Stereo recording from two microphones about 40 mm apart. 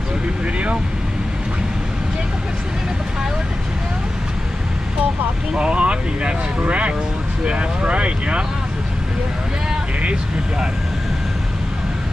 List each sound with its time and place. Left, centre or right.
5.5 s speech: right